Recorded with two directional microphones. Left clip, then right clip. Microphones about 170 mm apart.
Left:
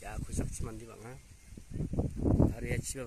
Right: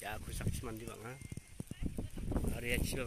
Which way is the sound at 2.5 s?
25° left (ahead or behind).